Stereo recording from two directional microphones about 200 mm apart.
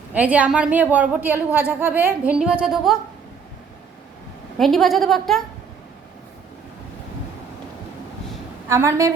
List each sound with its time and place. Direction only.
0.1 s a woman's voice: 5° right (ahead or behind)
4.5 s a woman's voice: centre (ahead or behind)
8.7 s a woman's voice: 15° right (ahead or behind)